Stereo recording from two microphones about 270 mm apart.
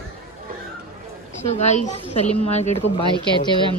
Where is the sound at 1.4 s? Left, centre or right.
Left.